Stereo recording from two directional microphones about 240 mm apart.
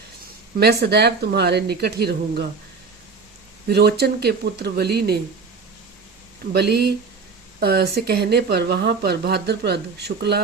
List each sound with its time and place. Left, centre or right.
0.6 s speech: right
3.7 s speech: right
6.5 s speech: right